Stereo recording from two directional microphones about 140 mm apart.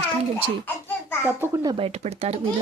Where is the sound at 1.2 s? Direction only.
20° right (ahead or behind).